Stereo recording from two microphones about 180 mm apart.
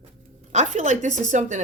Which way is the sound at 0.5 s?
40° right (ahead or behind).